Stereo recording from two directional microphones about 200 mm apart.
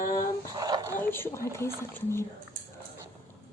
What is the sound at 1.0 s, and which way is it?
Speech, 10° left (ahead or behind).